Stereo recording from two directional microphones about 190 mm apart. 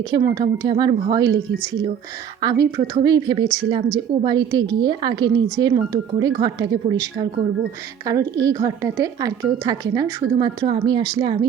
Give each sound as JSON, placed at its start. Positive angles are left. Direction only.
{"t": 0.1, "sound": "a woman's voice", "side_deg": -20}
{"t": 2.4, "sound": "a woman's voice", "side_deg": -20}